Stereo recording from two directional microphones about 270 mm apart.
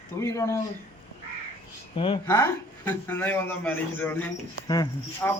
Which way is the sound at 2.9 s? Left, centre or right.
Centre.